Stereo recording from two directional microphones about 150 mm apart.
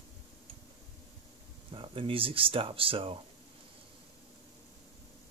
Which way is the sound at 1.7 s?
35° right (ahead or behind).